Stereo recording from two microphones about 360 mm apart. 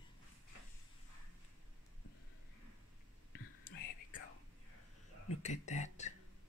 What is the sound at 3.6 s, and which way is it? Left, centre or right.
Whispering, left.